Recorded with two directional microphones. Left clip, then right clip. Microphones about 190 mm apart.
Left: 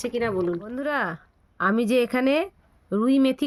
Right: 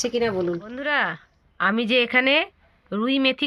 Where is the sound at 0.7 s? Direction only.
50° left (ahead or behind).